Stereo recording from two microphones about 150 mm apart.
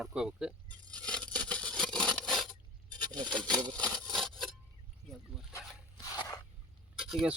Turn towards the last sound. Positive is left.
turn(degrees=-5)  # may be behind; listen again after turning